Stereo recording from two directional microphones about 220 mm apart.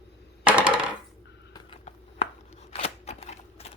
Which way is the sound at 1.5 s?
25° left (ahead or behind).